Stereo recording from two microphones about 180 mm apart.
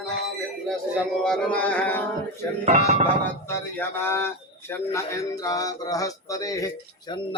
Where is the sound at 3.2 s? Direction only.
15° left (ahead or behind).